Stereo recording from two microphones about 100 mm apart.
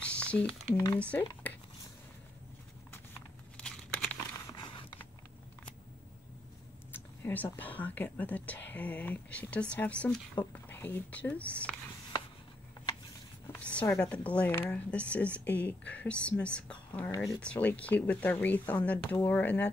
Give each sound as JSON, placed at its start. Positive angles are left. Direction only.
{"t": 0.0, "sound": "squish", "side_deg": 10}
{"t": 0.9, "sound": "speech", "side_deg": 15}
{"t": 3.5, "sound": "crumpling", "side_deg": 10}
{"t": 4.6, "sound": "a sound", "side_deg": 55}
{"t": 6.9, "sound": "a sound", "side_deg": 20}
{"t": 7.5, "sound": "speech", "side_deg": 15}
{"t": 13.6, "sound": "speech", "side_deg": 10}